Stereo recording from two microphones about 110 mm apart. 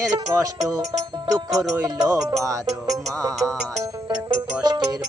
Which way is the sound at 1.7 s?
30° right (ahead or behind).